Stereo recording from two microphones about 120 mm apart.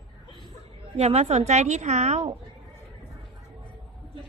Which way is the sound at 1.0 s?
65° right (ahead or behind).